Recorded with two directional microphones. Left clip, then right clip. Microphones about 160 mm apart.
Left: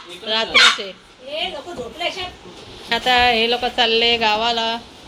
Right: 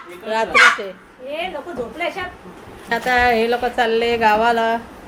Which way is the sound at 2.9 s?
5° right (ahead or behind).